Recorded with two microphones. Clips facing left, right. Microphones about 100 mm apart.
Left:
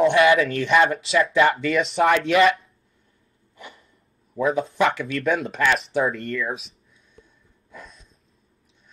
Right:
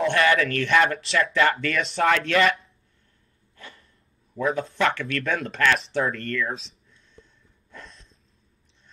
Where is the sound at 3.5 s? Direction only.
20° left (ahead or behind).